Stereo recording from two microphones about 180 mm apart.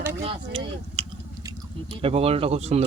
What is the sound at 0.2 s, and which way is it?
Speech, 35° right (ahead or behind).